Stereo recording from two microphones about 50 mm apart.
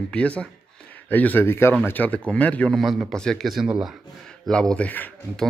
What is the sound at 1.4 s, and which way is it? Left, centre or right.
Speech, left.